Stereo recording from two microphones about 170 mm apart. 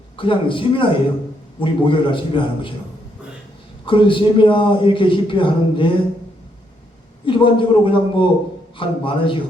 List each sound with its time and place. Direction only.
0.2 s a man's voice: 30° left (ahead or behind)
3.8 s a man's voice: 30° left (ahead or behind)
7.3 s a man's voice: 30° left (ahead or behind)